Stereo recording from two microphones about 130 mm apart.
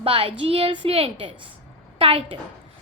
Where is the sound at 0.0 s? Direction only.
45° right (ahead or behind).